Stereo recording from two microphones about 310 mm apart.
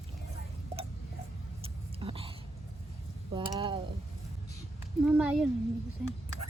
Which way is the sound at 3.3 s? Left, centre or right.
Centre.